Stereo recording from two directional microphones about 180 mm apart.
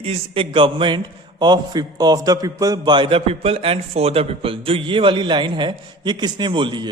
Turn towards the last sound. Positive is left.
turn(degrees=-25)  # may be behind; listen again after turning